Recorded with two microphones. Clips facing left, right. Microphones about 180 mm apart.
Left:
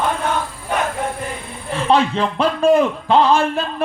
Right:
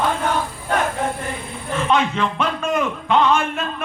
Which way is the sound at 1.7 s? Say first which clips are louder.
Left 3 dB; 35° left (ahead or behind).